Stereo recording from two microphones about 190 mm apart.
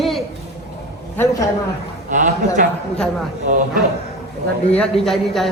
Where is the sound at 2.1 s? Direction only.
45° right (ahead or behind).